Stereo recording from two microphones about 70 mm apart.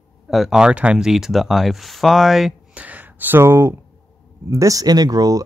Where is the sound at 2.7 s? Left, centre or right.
Right.